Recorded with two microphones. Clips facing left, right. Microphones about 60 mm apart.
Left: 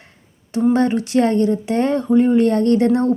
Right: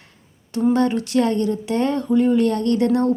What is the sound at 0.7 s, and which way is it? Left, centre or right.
Speech, left.